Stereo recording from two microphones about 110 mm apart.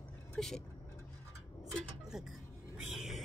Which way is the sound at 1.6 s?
Centre (ahead or behind).